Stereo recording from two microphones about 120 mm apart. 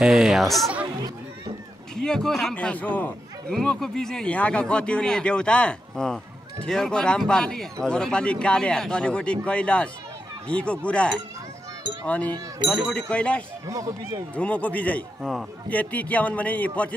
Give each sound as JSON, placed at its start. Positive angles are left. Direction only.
{"t": 0.0, "sound": "speech", "side_deg": -5}
{"t": 2.0, "sound": "a man's voice", "side_deg": 5}
{"t": 2.5, "sound": "speech", "side_deg": 10}
{"t": 13.7, "sound": "speech", "side_deg": -30}
{"t": 14.3, "sound": "speech", "side_deg": 10}